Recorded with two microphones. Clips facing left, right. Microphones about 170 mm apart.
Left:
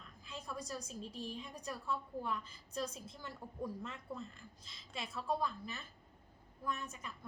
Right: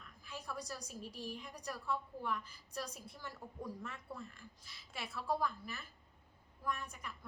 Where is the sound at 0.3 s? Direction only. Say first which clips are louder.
Left 1 dB; 20° left (ahead or behind).